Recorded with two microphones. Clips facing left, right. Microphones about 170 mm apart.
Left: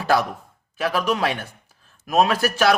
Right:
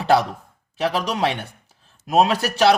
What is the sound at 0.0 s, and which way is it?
Speech, 30° right (ahead or behind).